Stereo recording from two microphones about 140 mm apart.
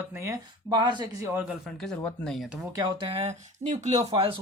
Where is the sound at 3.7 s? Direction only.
55° right (ahead or behind).